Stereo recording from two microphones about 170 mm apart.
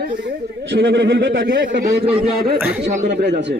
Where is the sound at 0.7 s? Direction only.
85° right; by 1.7 s 60° right (ahead or behind).